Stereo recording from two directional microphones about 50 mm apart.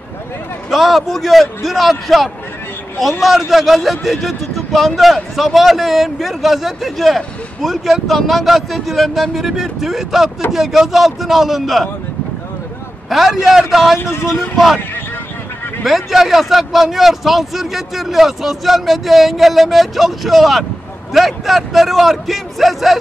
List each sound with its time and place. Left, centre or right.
0.7 s a man's voice: centre
13.1 s a man's voice: centre
13.9 s a man's voice: left
15.8 s a man's voice: centre